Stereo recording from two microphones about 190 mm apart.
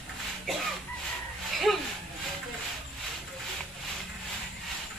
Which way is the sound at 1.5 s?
Centre (ahead or behind).